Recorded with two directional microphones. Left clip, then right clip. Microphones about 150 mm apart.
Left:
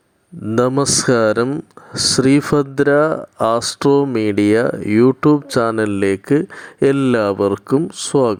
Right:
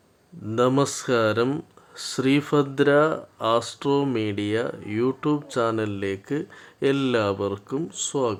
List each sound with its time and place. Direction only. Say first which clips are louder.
0.9 s speech: left 8 dB; 50° left (ahead or behind)